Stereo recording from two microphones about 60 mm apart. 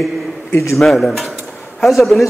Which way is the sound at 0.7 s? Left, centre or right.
Centre.